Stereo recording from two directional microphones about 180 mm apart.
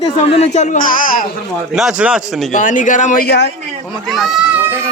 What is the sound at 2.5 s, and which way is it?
Speech, 45° left (ahead or behind).